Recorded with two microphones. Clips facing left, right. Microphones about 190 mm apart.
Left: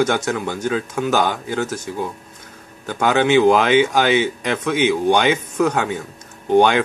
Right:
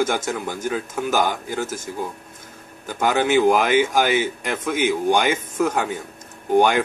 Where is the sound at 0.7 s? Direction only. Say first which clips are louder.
Left 3 dB; 80° left.